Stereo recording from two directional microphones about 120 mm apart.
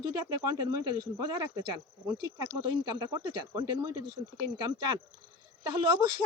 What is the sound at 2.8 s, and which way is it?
Speech, 30° right (ahead or behind).